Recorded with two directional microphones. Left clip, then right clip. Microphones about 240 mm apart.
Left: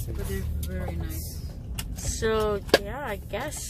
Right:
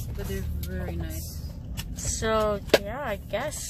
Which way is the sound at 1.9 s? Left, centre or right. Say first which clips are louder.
Right 1 dB; centre.